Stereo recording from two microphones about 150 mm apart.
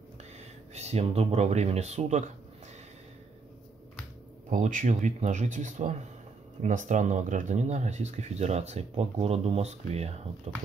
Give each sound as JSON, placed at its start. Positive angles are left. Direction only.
{"t": 0.7, "sound": "speech", "side_deg": -45}
{"t": 4.5, "sound": "speech", "side_deg": -60}